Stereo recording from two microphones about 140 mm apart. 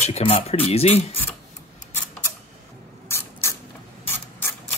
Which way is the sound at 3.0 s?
20° left (ahead or behind).